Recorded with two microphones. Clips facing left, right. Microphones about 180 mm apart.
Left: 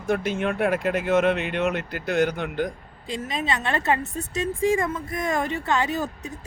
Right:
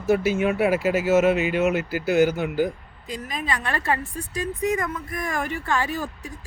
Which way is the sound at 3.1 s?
25° left (ahead or behind).